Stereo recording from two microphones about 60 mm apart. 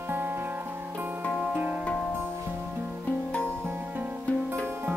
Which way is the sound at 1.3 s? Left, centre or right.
Right.